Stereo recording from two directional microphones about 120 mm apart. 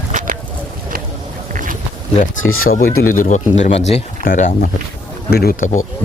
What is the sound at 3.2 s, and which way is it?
Speech, 85° left.